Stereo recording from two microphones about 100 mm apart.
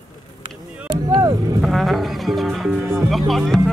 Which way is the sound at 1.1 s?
40° right (ahead or behind).